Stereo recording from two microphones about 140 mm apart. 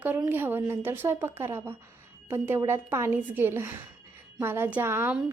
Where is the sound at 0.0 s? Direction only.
10° right (ahead or behind).